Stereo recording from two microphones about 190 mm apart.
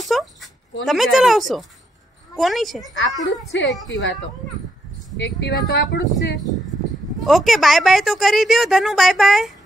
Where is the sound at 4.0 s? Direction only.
85° left.